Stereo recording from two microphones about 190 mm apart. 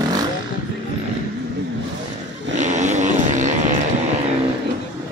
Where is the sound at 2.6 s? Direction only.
40° right (ahead or behind).